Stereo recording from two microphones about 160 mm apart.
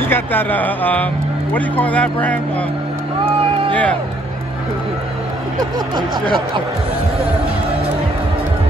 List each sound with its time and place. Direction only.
0.0 s speech: 10° left (ahead or behind)
3.3 s a sound: 35° right (ahead or behind)
5.9 s speech: 30° right (ahead or behind)